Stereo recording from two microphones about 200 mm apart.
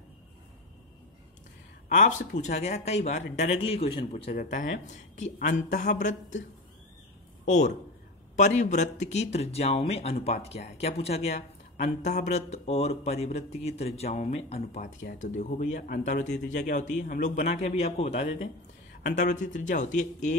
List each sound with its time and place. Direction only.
1.9 s speech: 40° left (ahead or behind)
4.4 s speech: 40° left (ahead or behind)
7.4 s a man's voice: 35° left (ahead or behind)